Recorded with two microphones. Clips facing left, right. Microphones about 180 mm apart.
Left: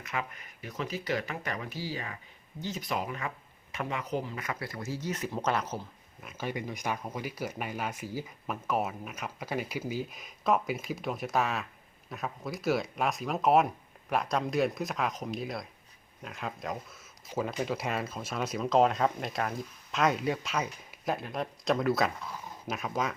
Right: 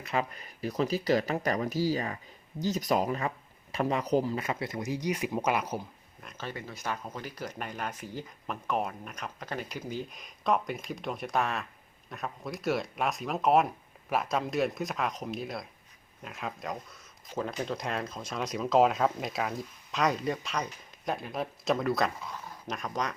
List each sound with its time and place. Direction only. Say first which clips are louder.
0.0 s speech: right 5 dB; 35° right (ahead or behind)
4.4 s speech: right 4 dB; 20° right (ahead or behind)
6.2 s speech: left 4 dB; 10° left (ahead or behind)